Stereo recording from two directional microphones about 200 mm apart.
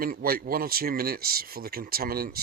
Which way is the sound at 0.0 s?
50° right (ahead or behind).